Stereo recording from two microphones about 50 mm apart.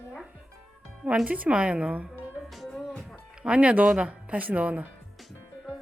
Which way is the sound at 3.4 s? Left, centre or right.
Right.